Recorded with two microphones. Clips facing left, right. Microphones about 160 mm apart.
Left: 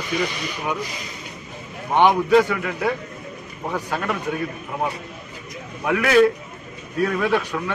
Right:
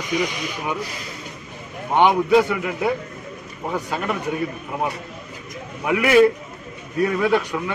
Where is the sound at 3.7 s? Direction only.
15° right (ahead or behind).